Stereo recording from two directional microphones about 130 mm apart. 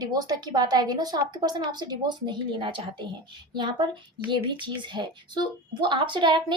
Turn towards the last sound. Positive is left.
turn(degrees=-35)  # may be behind; listen again after turning